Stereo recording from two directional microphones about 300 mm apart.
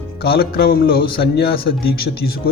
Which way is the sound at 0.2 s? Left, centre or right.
Left.